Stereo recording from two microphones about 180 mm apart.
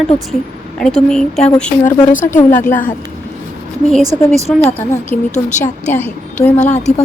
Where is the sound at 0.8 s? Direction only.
5° left (ahead or behind).